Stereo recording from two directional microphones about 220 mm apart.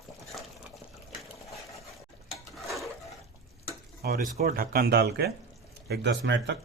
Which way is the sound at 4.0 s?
40° right (ahead or behind).